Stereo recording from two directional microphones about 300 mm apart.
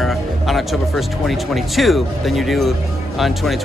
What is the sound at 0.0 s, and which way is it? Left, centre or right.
Speech, centre.